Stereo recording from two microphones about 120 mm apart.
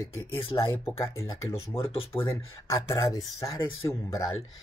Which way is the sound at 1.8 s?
50° left (ahead or behind).